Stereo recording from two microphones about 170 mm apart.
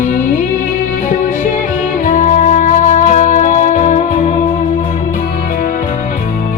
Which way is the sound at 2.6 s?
45° left (ahead or behind).